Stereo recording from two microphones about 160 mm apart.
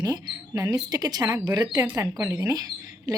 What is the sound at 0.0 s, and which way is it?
Speech, 25° right (ahead or behind).